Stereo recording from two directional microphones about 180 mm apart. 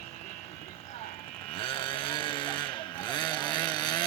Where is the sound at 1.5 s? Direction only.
30° left (ahead or behind).